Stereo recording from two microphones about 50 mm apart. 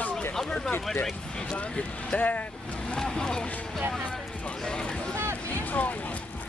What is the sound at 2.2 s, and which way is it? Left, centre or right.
Vehicle, left.